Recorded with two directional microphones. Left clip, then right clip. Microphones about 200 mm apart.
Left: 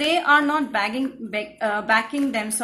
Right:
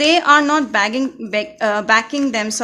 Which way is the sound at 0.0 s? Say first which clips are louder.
Right 6 dB; 45° right (ahead or behind).